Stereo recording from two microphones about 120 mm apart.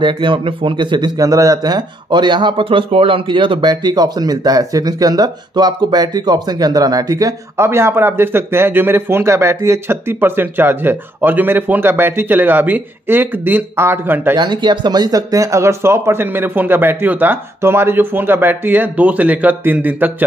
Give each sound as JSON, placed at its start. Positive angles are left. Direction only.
{"t": 0.0, "sound": "a man's voice", "side_deg": -45}
{"t": 14.3, "sound": "speech", "side_deg": -40}